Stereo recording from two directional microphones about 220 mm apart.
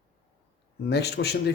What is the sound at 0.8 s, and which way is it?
Speech, 50° left (ahead or behind).